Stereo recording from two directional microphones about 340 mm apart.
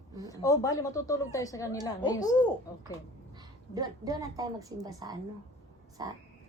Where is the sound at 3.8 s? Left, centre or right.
Centre.